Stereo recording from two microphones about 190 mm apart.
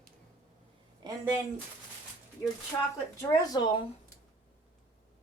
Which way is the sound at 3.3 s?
20° left (ahead or behind).